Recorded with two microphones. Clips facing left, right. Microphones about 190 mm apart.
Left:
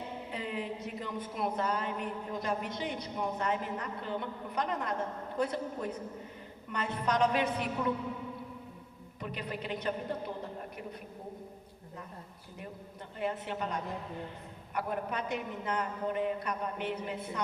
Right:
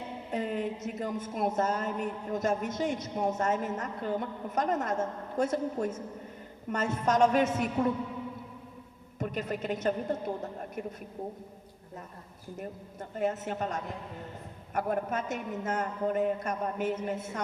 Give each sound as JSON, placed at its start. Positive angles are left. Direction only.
{"t": 0.3, "sound": "a woman's voice", "side_deg": -45}
{"t": 9.1, "sound": "a woman's voice", "side_deg": -45}
{"t": 13.1, "sound": "a woman's voice", "side_deg": -45}